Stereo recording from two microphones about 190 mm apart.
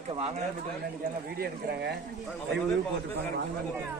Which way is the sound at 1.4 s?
60° right (ahead or behind).